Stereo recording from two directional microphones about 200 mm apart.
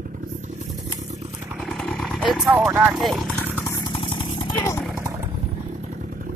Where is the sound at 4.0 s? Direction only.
25° left (ahead or behind).